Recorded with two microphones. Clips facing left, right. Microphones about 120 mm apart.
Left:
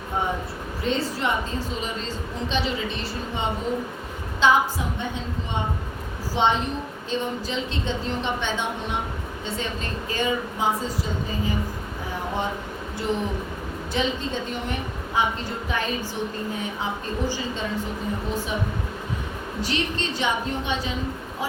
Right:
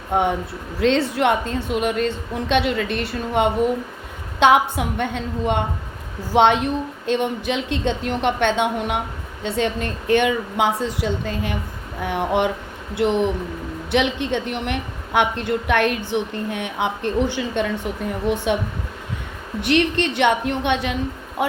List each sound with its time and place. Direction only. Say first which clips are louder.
0.1 s a woman's voice: right 7 dB; 75° right (ahead or behind)
18.3 s a woman's voice: right 9 dB; 75° right (ahead or behind)
19.6 s a woman's voice: right 9 dB; 65° right (ahead or behind)